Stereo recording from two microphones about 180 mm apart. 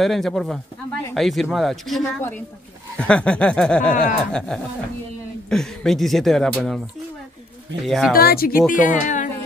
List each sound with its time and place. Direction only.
0.0 s speech: centre (ahead or behind)
7.8 s speech: centre (ahead or behind)
8.1 s speech: 55° left (ahead or behind)
8.7 s speech: 45° left (ahead or behind)